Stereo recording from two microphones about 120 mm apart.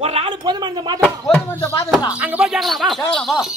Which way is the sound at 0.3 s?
35° right (ahead or behind).